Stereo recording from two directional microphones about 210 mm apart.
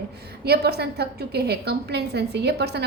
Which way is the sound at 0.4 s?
50° right (ahead or behind).